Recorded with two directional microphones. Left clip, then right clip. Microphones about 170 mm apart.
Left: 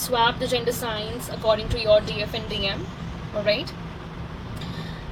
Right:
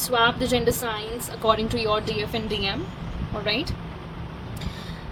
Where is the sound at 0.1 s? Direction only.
50° right (ahead or behind).